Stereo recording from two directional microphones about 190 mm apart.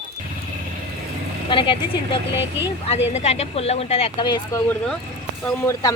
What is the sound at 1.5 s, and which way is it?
Speech, 25° left (ahead or behind).